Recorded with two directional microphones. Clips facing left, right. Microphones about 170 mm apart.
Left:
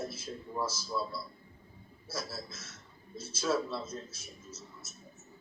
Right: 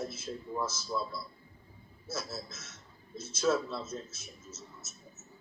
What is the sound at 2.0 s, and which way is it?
A man's voice, 10° left (ahead or behind).